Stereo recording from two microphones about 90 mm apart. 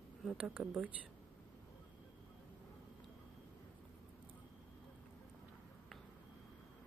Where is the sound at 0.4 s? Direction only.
15° right (ahead or behind).